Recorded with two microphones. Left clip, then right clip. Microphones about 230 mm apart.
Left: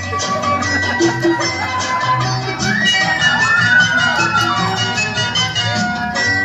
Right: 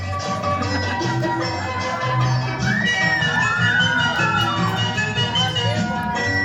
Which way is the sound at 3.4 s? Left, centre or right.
Left.